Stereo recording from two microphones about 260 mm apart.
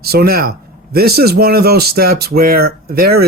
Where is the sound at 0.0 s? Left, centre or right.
Right.